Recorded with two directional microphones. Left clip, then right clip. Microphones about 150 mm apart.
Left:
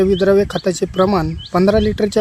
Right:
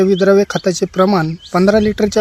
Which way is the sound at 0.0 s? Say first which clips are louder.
Right 2 dB; 20° right (ahead or behind).